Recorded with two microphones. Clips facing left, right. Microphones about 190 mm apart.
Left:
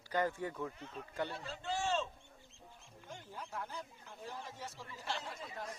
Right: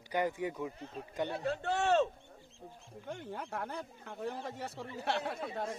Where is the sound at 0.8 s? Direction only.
35° right (ahead or behind).